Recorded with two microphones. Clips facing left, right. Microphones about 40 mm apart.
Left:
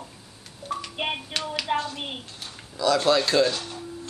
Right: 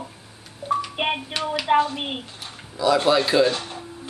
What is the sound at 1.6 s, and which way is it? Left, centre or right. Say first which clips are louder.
Speech: right 10 dB; right.